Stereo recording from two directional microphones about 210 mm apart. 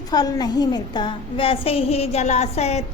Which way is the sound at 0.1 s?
20° left (ahead or behind).